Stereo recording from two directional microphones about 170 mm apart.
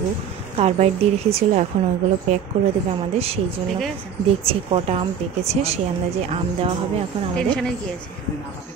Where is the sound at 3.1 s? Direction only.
35° right (ahead or behind).